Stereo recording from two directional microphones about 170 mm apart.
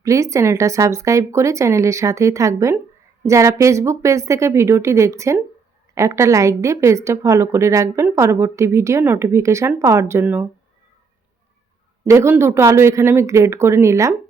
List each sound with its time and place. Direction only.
0.0 s a woman's voice: 20° right (ahead or behind)
12.0 s a woman's voice: 15° right (ahead or behind)